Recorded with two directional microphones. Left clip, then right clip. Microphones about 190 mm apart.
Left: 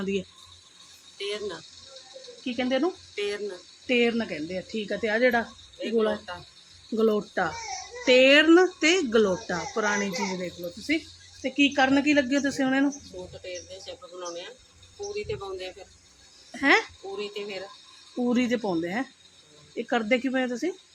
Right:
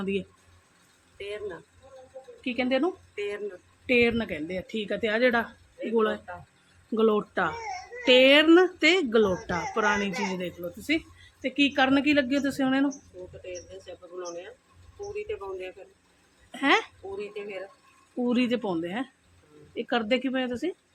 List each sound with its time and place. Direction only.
0.0 s speech: centre (ahead or behind)
1.2 s speech: 15° left (ahead or behind)
2.4 s a woman's voice: centre (ahead or behind)
18.3 s speech: 10° left (ahead or behind)